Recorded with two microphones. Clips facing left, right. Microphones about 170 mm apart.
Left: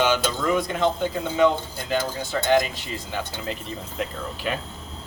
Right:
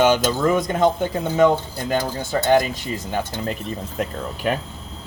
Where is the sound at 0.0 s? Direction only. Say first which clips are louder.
Right 5 dB; 45° right (ahead or behind).